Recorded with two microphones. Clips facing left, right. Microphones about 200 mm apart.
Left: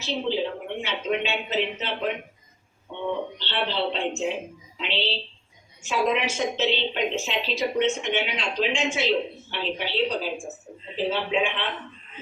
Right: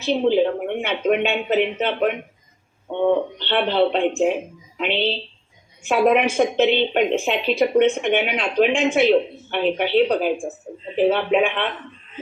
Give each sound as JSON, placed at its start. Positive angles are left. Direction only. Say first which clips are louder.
{"t": 0.0, "sound": "a woman's voice", "louder": "right 9 dB", "side_deg": -55}